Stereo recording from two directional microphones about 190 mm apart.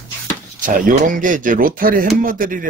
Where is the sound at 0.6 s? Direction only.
45° right (ahead or behind).